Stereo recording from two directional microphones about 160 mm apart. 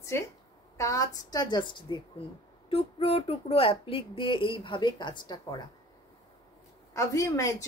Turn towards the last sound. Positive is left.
turn(degrees=20)  # may be behind; listen again after turning